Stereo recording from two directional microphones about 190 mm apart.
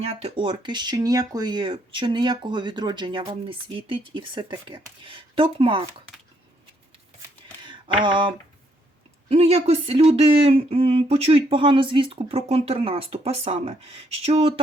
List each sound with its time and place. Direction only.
0.0 s speech: 35° right (ahead or behind)
7.6 s a sound: 25° right (ahead or behind)
9.3 s speech: 30° right (ahead or behind)